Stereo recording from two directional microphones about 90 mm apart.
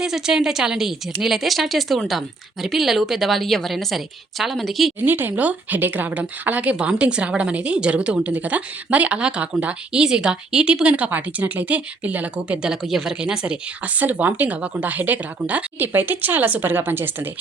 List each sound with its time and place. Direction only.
0.0 s speech: 5° right (ahead or behind)
5.0 s speech: 20° right (ahead or behind)